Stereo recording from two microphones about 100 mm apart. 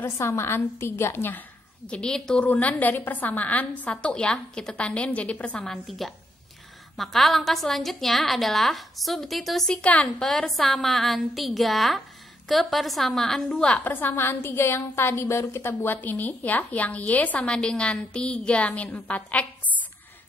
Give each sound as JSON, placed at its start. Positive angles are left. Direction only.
{"t": 0.0, "sound": "a woman's voice", "side_deg": 25}
{"t": 1.9, "sound": "a woman's voice", "side_deg": 10}
{"t": 13.8, "sound": "a woman's voice", "side_deg": 20}